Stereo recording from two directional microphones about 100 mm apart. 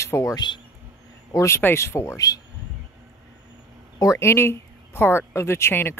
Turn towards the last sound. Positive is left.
turn(degrees=25)  # may be behind; listen again after turning